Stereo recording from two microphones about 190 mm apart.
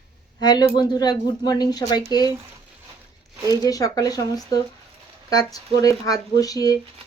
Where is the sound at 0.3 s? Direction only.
20° left (ahead or behind).